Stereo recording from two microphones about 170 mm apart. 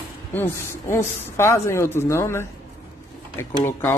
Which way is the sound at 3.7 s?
15° left (ahead or behind).